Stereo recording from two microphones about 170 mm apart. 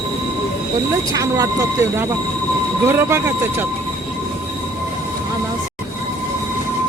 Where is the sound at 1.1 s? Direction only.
20° right (ahead or behind).